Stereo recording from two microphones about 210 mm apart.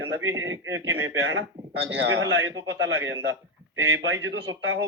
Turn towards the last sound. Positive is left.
turn(degrees=-60)  # may be behind; listen again after turning